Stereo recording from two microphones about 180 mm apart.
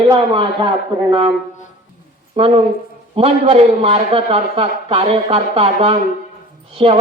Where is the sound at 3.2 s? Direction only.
30° right (ahead or behind).